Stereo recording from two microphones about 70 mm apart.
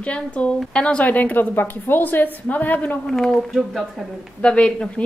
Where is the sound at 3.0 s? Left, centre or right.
Centre.